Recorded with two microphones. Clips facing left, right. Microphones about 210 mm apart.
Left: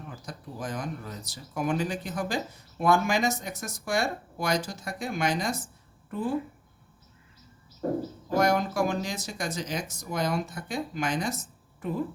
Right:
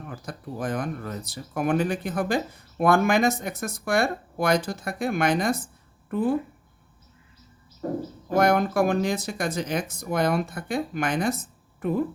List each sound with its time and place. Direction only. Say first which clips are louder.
0.1 s speech: right 5 dB; 55° right (ahead or behind)
8.3 s speech: right 4 dB; 60° right (ahead or behind)